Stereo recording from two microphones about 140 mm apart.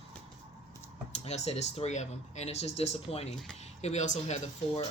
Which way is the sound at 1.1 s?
50° left (ahead or behind).